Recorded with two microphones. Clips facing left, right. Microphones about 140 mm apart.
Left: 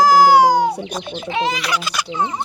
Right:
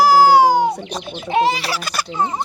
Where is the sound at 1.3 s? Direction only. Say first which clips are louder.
Right 4 dB; 40° right (ahead or behind).